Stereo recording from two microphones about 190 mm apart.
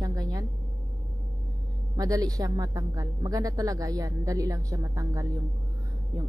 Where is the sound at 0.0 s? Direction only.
20° right (ahead or behind).